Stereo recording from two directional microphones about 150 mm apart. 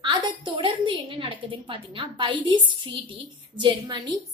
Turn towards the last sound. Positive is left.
turn(degrees=-30)  # may be behind; listen again after turning